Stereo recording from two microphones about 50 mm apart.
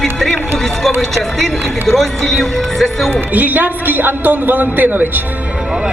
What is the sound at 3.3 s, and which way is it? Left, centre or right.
A man's voice, right.